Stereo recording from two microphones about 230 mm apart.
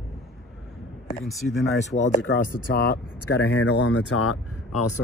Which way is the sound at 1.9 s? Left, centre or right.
Left.